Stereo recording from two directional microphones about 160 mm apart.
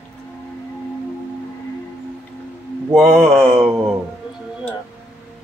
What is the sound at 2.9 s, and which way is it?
Speech, centre (ahead or behind).